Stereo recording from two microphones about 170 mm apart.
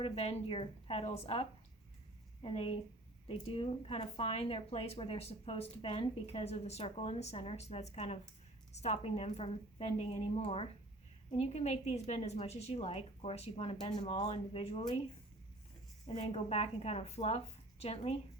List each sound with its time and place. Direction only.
0.0 s a woman's voice: 35° left (ahead or behind)
16.0 s a woman's voice: 35° left (ahead or behind)